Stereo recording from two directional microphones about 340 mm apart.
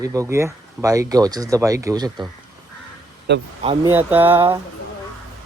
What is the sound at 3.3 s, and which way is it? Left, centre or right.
Speech, right.